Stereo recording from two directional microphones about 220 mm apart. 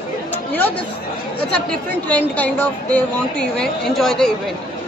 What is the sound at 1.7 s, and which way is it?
A woman's voice, 5° left (ahead or behind).